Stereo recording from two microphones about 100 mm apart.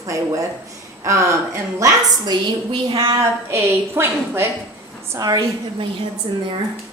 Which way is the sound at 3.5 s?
25° right (ahead or behind).